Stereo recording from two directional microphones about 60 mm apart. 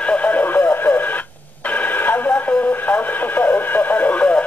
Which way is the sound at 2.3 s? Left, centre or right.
Left.